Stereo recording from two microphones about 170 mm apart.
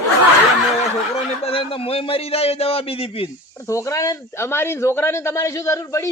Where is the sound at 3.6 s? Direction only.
20° left (ahead or behind).